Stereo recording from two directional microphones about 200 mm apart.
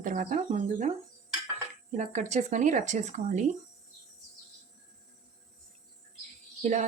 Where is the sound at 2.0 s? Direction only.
35° right (ahead or behind).